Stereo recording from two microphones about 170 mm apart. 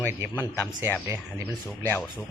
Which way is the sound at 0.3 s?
15° left (ahead or behind).